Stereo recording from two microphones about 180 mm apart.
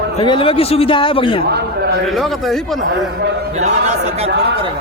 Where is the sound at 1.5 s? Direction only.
65° right (ahead or behind).